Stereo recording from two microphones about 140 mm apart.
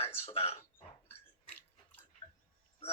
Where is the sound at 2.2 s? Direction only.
35° left (ahead or behind).